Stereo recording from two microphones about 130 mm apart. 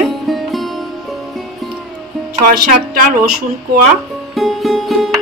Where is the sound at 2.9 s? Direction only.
85° right.